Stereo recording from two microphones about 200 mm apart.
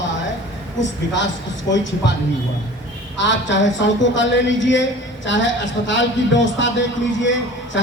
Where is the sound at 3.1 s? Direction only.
65° left (ahead or behind).